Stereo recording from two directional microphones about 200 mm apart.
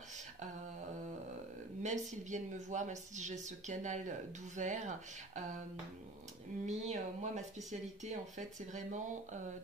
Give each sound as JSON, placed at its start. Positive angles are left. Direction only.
{"t": 1.8, "sound": "speech", "side_deg": -35}
{"t": 6.6, "sound": "speech", "side_deg": -35}